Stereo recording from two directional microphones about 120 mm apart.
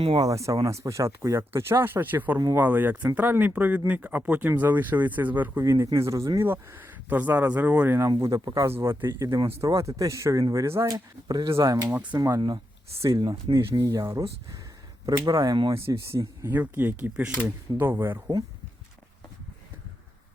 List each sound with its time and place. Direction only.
0.2 s speech: 25° right (ahead or behind)
8.2 s speech: 30° right (ahead or behind)
10.9 s speech: 35° right (ahead or behind)
13.0 s speech: 25° right (ahead or behind)
13.5 s speech: 45° right (ahead or behind)
13.9 s speech: 25° right (ahead or behind)
15.3 s speech: 35° right (ahead or behind)
15.7 s speech: 20° right (ahead or behind)